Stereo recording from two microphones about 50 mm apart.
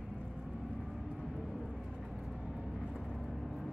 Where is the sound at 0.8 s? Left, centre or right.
Centre.